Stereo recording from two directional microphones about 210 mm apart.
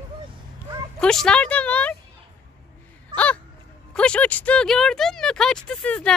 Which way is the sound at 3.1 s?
5° left (ahead or behind).